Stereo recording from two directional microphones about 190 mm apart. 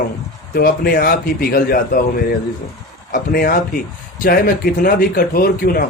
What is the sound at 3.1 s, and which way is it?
Speech, 50° left (ahead or behind).